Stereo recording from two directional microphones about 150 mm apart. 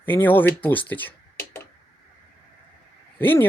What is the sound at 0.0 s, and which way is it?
Speech, 15° left (ahead or behind).